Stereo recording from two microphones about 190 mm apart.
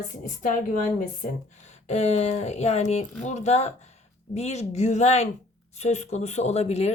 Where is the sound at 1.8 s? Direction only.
35° left (ahead or behind).